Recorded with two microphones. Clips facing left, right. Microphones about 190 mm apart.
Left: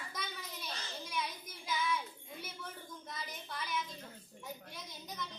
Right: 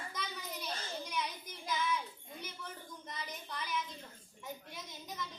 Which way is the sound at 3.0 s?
Centre (ahead or behind).